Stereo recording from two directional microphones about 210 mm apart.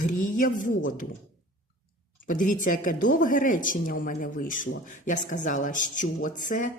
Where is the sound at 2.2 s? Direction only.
40° left (ahead or behind).